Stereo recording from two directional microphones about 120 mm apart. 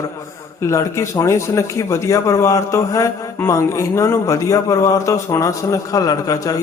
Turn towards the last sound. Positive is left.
turn(degrees=30)  # may be behind; listen again after turning